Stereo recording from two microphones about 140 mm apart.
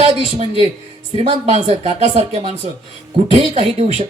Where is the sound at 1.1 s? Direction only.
50° right (ahead or behind).